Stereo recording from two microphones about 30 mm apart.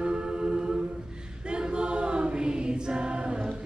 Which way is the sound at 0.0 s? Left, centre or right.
Right.